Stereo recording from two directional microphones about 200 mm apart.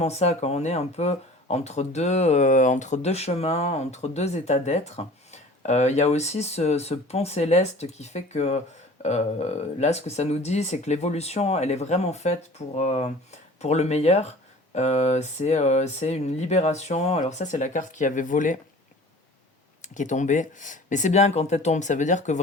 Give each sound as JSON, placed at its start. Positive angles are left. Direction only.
{"t": 0.0, "sound": "speech", "side_deg": 30}
{"t": 19.8, "sound": "speech", "side_deg": 40}